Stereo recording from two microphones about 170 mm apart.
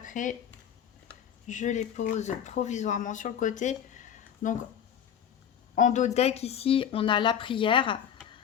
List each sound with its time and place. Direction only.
0.0 s speech: 50° left (ahead or behind)
1.5 s speech: 45° left (ahead or behind)
5.7 s speech: 45° left (ahead or behind); by 7.9 s 30° left (ahead or behind)